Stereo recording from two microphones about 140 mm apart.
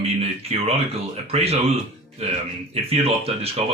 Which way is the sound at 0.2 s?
45° right (ahead or behind).